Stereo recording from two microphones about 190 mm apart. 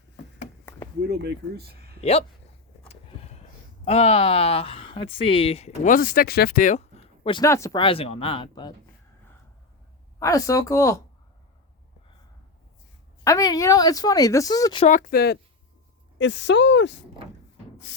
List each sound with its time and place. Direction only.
0.7 s a sound: 10° left (ahead or behind)
1.0 s speech: 60° right (ahead or behind)
2.0 s speech: 30° left (ahead or behind)
2.9 s a sound: 35° left (ahead or behind)
3.8 s speech: 35° left (ahead or behind)
10.2 s speech: 15° left (ahead or behind)
13.2 s speech: 20° left (ahead or behind)
14.8 s speech: 45° left (ahead or behind)
16.1 s speech: 70° left (ahead or behind)